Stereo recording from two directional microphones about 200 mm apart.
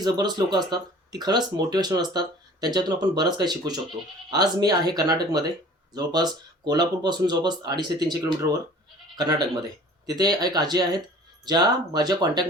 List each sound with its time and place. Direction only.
0.0 s speech: 20° right (ahead or behind)